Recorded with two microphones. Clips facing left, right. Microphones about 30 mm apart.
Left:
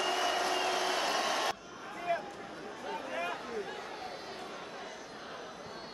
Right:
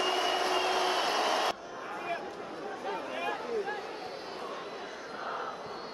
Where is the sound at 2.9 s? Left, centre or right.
Centre.